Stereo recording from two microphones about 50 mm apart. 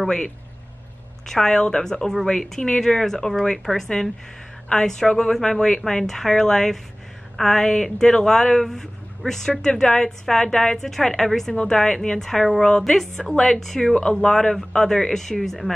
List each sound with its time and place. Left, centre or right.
1.2 s speech: centre
4.6 s speech: centre